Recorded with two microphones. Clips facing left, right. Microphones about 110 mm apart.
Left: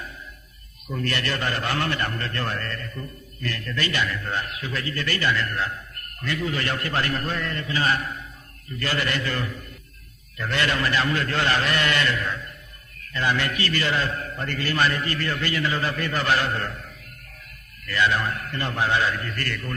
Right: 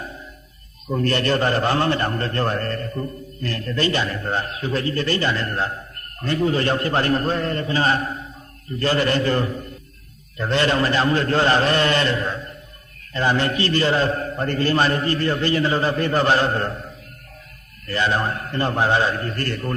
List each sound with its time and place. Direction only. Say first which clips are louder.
0.9 s a man's voice: right 7 dB; 35° right (ahead or behind)